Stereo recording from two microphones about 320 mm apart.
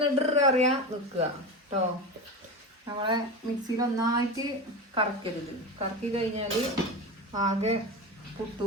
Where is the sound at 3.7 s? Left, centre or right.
Centre.